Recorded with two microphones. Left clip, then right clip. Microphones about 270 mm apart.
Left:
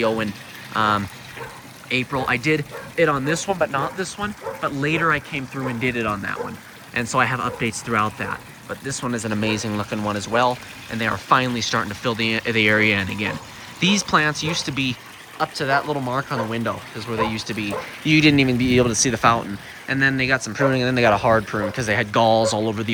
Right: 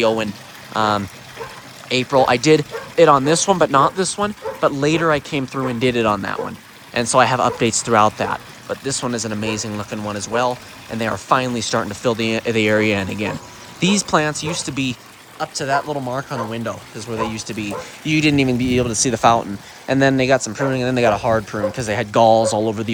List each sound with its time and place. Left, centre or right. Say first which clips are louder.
0.0 s speech: right 4 dB; centre
3.8 s speech: right 9 dB; left
4.0 s speech: right 6 dB; centre